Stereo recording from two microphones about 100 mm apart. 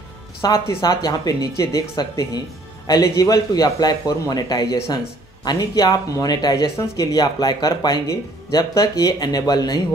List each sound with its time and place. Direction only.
0.4 s speech: 40° left (ahead or behind)